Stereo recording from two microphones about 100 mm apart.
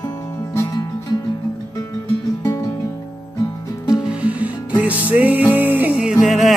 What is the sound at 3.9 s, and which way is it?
Music, 10° right (ahead or behind).